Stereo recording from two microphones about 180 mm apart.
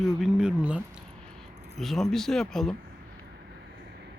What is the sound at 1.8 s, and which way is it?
Speech, centre (ahead or behind).